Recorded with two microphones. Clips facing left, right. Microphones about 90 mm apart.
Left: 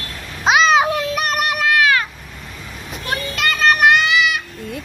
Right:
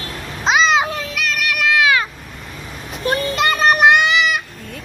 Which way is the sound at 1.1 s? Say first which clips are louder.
Left 3 dB; 45° left (ahead or behind).